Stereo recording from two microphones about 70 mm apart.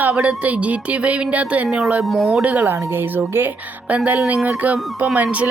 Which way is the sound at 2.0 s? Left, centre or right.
Centre.